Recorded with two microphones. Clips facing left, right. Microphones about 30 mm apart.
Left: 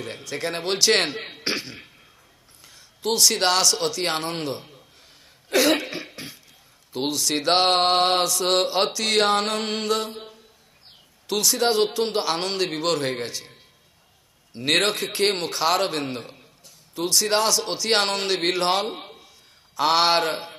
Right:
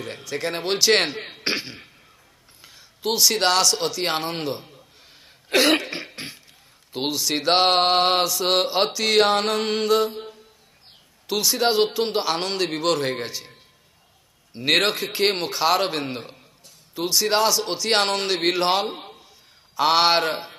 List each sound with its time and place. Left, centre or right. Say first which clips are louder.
0.0 s mantra: right 1 dB; centre
1.4 s throat clearing: right 2 dB; centre
3.0 s mantra: even; centre
5.5 s cough: right 1 dB; right
6.9 s mantra: even; centre
11.2 s mantra: even; centre
14.5 s mantra: right 1 dB; centre